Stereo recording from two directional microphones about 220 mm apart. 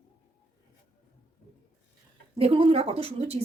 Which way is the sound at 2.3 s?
25° right (ahead or behind).